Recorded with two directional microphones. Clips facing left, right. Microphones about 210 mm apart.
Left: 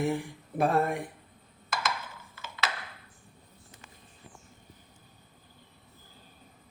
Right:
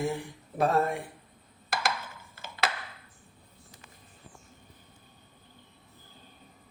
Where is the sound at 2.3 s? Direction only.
50° right (ahead or behind).